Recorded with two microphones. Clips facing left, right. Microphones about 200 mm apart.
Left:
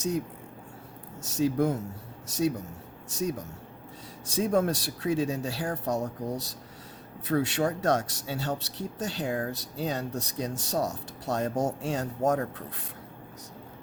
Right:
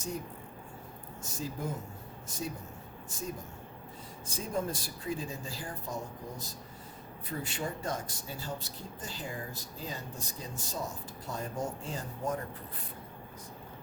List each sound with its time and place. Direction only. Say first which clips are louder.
1.2 s speech: left 13 dB; 75° left (ahead or behind)